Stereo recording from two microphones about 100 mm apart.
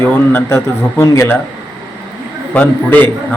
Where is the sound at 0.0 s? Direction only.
25° left (ahead or behind).